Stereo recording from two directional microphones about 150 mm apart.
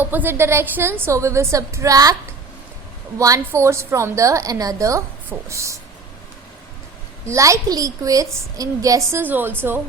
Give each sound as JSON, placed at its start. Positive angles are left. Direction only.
{"t": 0.0, "sound": "a woman's voice", "side_deg": -10}
{"t": 3.2, "sound": "a woman's voice", "side_deg": -20}
{"t": 7.3, "sound": "a woman's voice", "side_deg": -20}